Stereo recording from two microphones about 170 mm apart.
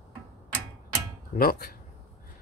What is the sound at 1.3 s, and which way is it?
Speech, 60° left (ahead or behind).